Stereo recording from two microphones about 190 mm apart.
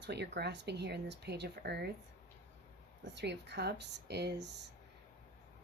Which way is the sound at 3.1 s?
65° right (ahead or behind).